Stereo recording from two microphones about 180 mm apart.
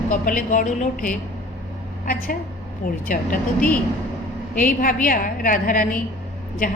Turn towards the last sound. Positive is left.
turn(degrees=50)  # may be behind; listen again after turning